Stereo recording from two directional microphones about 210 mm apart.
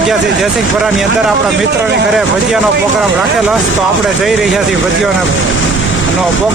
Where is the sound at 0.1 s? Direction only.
Centre (ahead or behind).